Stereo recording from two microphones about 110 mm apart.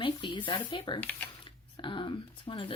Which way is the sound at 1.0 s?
15° left (ahead or behind).